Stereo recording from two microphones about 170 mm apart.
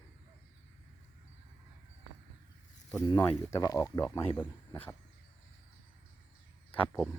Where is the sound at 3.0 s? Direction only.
10° left (ahead or behind).